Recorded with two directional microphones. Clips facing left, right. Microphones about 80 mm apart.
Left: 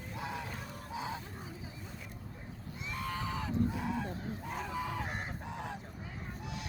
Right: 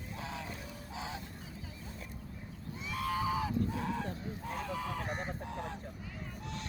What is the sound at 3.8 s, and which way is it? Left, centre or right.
Fowl, centre.